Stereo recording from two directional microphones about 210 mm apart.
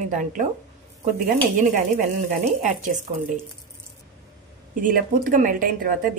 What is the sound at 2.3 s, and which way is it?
Speech, 35° right (ahead or behind).